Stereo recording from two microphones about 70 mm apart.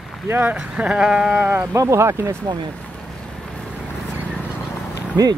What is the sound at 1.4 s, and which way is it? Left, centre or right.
Speech, right.